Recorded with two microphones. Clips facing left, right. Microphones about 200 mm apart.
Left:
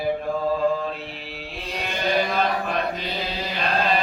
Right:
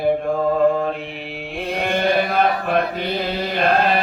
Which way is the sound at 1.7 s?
55° right (ahead or behind).